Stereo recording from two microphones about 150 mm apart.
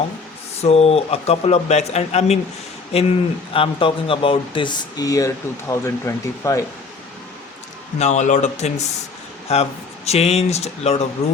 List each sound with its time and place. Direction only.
0.6 s speech: 45° left (ahead or behind); by 6.6 s 20° left (ahead or behind)
7.9 s speech: 50° left (ahead or behind)